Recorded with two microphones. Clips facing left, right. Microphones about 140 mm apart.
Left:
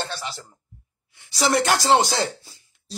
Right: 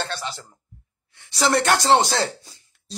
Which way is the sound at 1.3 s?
Centre (ahead or behind).